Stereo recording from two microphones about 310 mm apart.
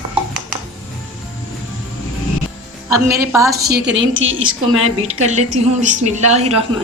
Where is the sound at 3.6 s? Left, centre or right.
Right.